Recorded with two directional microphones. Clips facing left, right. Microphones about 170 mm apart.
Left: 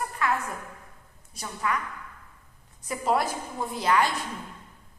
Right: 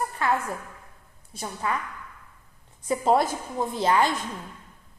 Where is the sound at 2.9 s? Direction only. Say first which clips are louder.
Right 4 dB; 25° right (ahead or behind).